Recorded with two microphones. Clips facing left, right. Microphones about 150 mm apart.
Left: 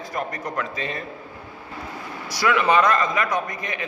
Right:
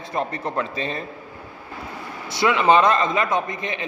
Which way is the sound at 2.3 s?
25° right (ahead or behind).